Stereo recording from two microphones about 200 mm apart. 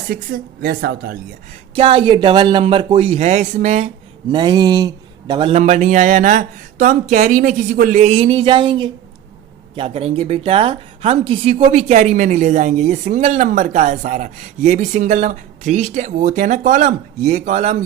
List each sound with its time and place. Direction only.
0.1 s speech: 50° right (ahead or behind)
1.7 s speech: 25° right (ahead or behind)
4.3 s a woman's voice: 20° right (ahead or behind)